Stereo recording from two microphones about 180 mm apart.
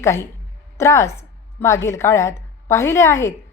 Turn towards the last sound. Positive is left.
turn(degrees=15)  # may be behind; listen again after turning